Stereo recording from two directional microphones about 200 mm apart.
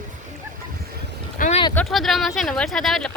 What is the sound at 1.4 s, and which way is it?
Boat, 35° left (ahead or behind).